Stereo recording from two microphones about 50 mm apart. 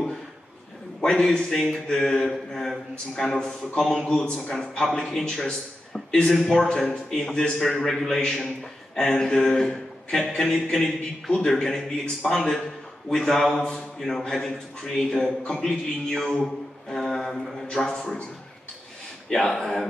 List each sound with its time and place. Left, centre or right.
1.0 s a man's voice: centre
4.5 s a man's voice: centre
16.9 s a sound: centre
17.6 s a man's voice: centre
19.2 s a man's voice: centre